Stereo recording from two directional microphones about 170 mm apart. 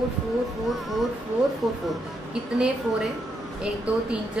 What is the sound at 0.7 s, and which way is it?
Speech, centre (ahead or behind).